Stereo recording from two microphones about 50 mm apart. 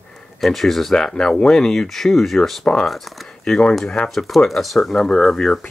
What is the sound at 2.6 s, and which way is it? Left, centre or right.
Speech, centre.